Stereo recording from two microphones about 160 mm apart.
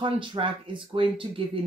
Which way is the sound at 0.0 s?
30° right (ahead or behind).